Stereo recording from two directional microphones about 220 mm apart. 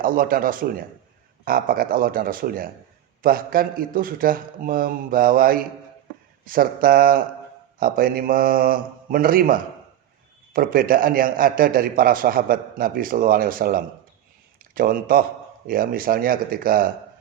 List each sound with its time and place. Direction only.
0.0 s a man's voice: 40° right (ahead or behind)